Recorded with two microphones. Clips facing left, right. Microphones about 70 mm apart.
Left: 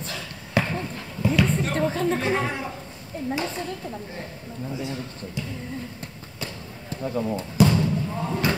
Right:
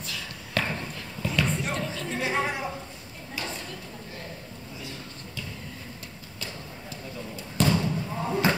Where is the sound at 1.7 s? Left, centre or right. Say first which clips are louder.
Left 8 dB; left.